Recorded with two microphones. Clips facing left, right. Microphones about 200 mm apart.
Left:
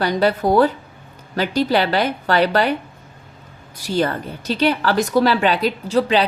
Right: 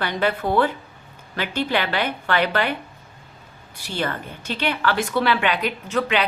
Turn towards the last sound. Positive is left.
turn(degrees=30)  # may be behind; listen again after turning